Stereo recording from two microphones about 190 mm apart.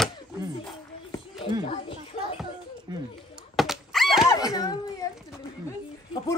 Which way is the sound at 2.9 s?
25° right (ahead or behind).